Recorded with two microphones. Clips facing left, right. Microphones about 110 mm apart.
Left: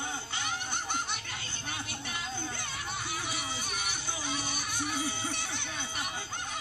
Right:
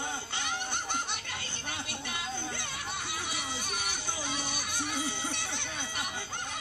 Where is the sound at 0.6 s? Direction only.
5° right (ahead or behind).